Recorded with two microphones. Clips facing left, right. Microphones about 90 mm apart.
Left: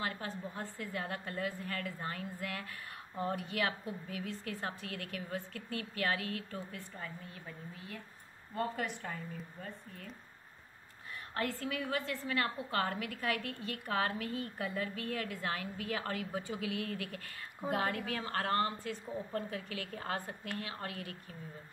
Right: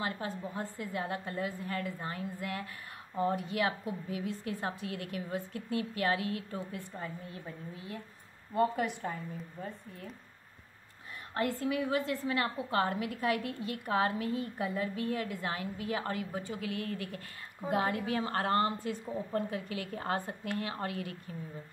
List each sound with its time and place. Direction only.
0.0 s a woman's voice: 15° right (ahead or behind)
9.0 s a woman's voice: 25° right (ahead or behind)
11.3 s a woman's voice: 10° right (ahead or behind)
16.3 s a woman's voice: 5° left (ahead or behind); by 21.2 s 25° right (ahead or behind)